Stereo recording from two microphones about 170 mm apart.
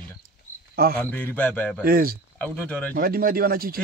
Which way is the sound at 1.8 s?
60° right (ahead or behind).